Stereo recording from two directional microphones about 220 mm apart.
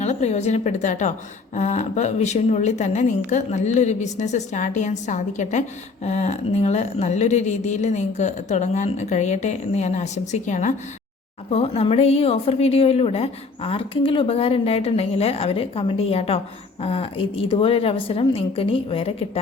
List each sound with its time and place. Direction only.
0.0 s a woman's voice: 30° left (ahead or behind)